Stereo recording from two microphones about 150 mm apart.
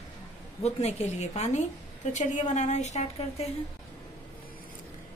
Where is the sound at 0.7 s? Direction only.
45° left (ahead or behind).